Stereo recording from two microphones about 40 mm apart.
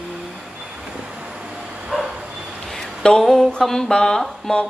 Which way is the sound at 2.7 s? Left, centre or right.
Centre.